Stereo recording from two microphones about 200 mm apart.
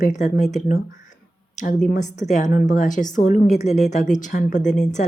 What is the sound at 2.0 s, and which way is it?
Speech, 35° left (ahead or behind).